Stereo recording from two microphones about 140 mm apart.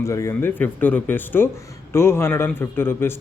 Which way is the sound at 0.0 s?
20° left (ahead or behind).